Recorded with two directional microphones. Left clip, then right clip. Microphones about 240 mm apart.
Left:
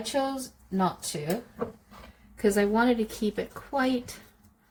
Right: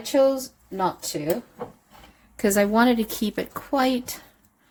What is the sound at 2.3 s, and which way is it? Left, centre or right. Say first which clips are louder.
A woman's voice: right 4 dB; right.